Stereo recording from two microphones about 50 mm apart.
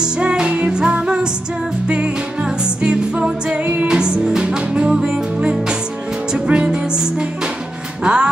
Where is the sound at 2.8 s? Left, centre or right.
Centre.